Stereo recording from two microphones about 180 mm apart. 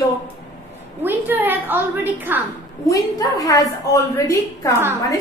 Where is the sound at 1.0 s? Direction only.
10° right (ahead or behind).